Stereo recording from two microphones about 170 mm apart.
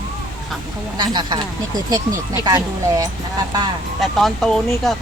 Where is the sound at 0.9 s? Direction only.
25° right (ahead or behind).